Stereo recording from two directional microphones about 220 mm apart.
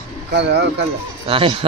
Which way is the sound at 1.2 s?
25° right (ahead or behind).